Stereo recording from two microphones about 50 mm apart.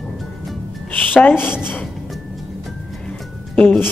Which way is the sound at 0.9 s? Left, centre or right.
Left.